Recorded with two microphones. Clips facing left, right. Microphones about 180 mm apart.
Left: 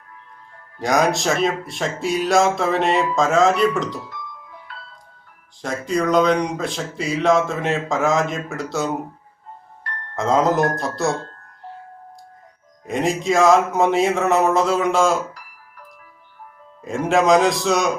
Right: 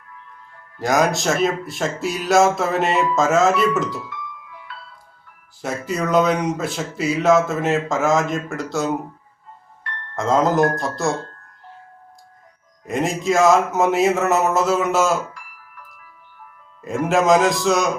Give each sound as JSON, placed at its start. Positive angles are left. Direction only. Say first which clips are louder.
{"t": 0.8, "sound": "speech", "louder": "even", "side_deg": 0}
{"t": 4.1, "sound": "music", "louder": "right 1 dB", "side_deg": 40}
{"t": 5.6, "sound": "speech", "louder": "left 2 dB", "side_deg": -5}
{"t": 10.2, "sound": "speech", "louder": "right 1 dB", "side_deg": 0}
{"t": 12.8, "sound": "speech", "louder": "left 1 dB", "side_deg": 0}
{"t": 15.3, "sound": "music", "louder": "even", "side_deg": 40}
{"t": 16.8, "sound": "speech", "louder": "even", "side_deg": 0}